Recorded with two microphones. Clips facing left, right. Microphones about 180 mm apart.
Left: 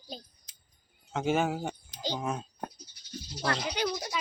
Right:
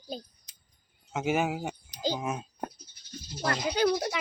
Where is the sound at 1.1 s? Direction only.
5° right (ahead or behind).